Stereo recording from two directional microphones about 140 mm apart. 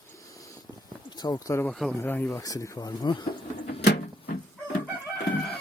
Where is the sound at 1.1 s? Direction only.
30° left (ahead or behind).